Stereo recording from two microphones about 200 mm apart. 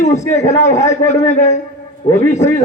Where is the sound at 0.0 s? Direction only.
35° left (ahead or behind).